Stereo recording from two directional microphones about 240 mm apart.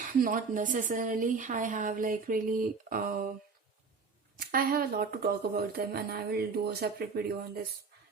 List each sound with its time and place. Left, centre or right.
0.0 s speech: right
4.4 s speech: right